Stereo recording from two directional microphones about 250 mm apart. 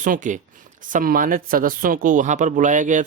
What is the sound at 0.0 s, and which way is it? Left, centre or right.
Speech, right.